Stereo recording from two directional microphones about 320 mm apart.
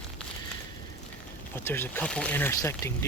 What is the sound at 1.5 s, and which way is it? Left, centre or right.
Speech, centre.